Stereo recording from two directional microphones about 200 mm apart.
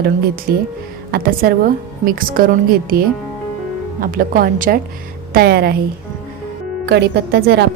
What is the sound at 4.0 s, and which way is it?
A woman's voice, 45° right (ahead or behind).